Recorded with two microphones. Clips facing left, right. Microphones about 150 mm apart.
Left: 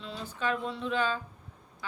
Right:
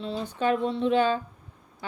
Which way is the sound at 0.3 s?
35° right (ahead or behind).